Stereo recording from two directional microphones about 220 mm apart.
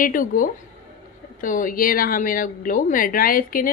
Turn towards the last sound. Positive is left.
turn(degrees=40)  # may be behind; listen again after turning